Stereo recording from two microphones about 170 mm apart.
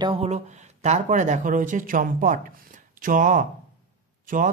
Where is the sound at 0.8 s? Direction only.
45° right (ahead or behind).